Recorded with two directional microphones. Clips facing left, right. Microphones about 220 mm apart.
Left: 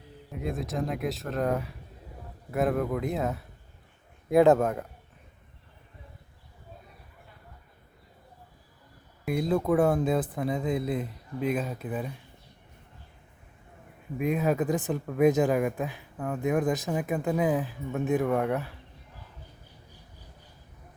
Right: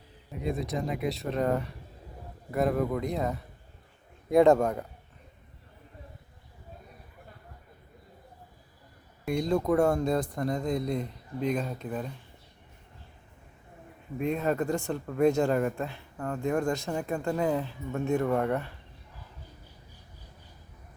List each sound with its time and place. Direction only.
0.3 s speech: centre (ahead or behind)
9.2 s speech: 5° left (ahead or behind)
14.2 s speech: 5° left (ahead or behind)
15.2 s speech: 15° left (ahead or behind)